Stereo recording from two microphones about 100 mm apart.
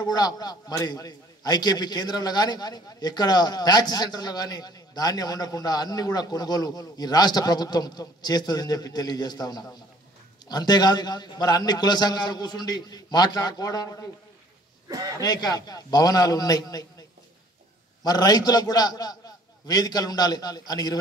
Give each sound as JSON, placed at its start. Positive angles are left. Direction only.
{"t": 0.0, "sound": "a man's voice", "side_deg": 40}
{"t": 14.9, "sound": "a man's voice", "side_deg": -40}
{"t": 15.1, "sound": "a man's voice", "side_deg": 40}
{"t": 18.0, "sound": "a man's voice", "side_deg": 40}